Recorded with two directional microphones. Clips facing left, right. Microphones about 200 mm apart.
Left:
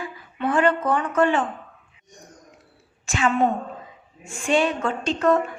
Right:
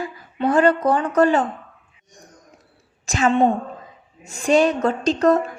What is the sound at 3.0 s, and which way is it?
A woman's voice, 40° right (ahead or behind).